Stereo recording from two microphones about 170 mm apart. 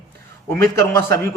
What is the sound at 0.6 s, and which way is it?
Speech, 15° left (ahead or behind).